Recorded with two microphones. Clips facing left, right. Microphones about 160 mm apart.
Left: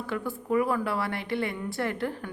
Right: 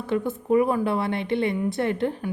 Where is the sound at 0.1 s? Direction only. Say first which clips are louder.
Right 7 dB; 20° right (ahead or behind).